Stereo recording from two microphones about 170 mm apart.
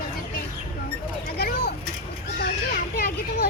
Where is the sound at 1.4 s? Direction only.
70° left (ahead or behind).